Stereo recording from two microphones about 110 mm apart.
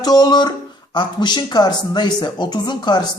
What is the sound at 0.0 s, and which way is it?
Speech, 35° left (ahead or behind).